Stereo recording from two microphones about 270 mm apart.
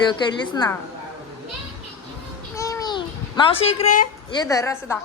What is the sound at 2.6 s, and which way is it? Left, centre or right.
Babbling, centre.